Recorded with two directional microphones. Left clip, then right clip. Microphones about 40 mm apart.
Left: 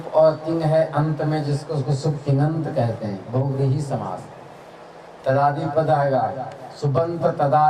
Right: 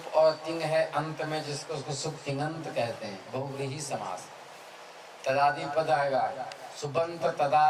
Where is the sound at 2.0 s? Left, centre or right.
Right.